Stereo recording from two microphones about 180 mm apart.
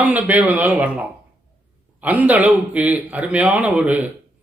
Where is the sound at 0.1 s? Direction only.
10° right (ahead or behind).